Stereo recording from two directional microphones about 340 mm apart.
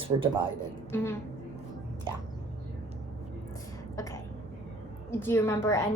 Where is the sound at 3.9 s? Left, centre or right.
Centre.